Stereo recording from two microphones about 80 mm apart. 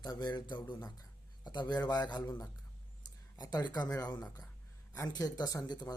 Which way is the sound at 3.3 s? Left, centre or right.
Left.